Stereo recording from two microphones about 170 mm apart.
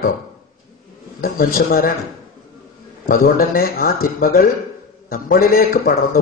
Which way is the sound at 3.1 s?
60° left (ahead or behind).